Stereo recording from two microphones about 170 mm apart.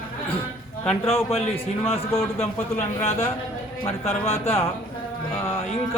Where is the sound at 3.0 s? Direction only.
40° left (ahead or behind).